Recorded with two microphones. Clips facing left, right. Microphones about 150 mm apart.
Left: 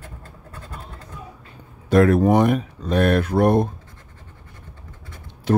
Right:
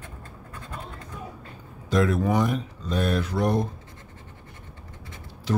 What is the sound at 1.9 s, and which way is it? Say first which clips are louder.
Speech: left 8 dB; 60° left (ahead or behind).